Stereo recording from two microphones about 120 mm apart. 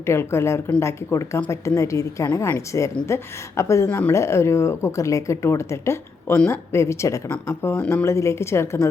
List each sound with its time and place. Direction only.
0.0 s a woman's voice: 20° left (ahead or behind)